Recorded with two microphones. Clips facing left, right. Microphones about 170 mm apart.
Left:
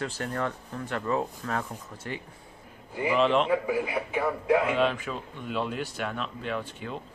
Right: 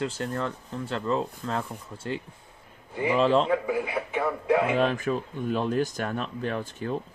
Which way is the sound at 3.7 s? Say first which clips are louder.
Even; 5° left (ahead or behind).